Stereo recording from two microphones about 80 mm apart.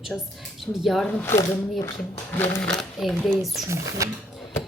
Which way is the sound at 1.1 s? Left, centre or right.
Left.